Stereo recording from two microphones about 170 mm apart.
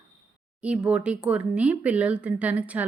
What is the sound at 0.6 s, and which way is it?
Speech, 5° right (ahead or behind).